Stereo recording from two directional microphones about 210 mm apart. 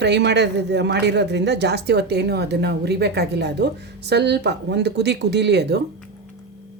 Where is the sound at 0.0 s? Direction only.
55° right (ahead or behind).